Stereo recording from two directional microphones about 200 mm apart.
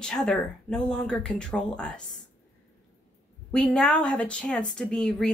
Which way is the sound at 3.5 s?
5° left (ahead or behind).